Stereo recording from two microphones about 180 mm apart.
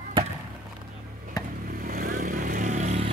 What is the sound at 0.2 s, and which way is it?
Chop, 30° right (ahead or behind).